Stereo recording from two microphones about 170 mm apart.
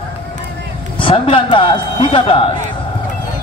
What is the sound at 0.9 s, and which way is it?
Speech, 30° left (ahead or behind).